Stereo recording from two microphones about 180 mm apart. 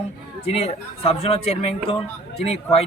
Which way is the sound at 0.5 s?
35° left (ahead or behind).